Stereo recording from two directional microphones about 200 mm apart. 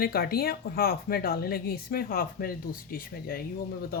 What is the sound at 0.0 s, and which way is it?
Speech, 50° left (ahead or behind).